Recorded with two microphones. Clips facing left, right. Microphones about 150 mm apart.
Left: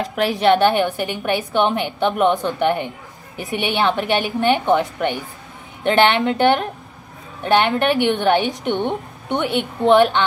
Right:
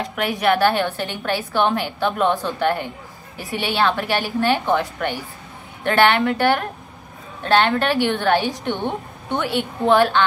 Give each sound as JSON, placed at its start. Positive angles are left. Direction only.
{"t": 0.0, "sound": "a woman's voice", "side_deg": 40}
{"t": 0.4, "sound": "a woman's voice", "side_deg": 25}